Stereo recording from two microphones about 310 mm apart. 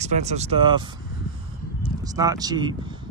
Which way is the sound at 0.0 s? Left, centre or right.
Right.